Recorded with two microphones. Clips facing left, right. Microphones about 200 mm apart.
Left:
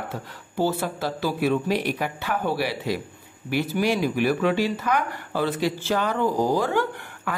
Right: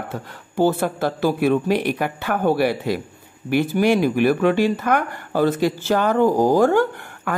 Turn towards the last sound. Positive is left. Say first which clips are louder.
# right 5 dB
turn(degrees=-50)  # may be behind; listen again after turning